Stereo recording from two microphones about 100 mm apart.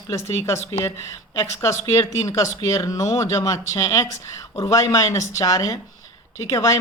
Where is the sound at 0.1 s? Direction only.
30° left (ahead or behind).